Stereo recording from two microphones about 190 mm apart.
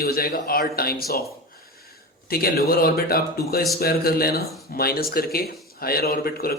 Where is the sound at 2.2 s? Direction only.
50° left (ahead or behind).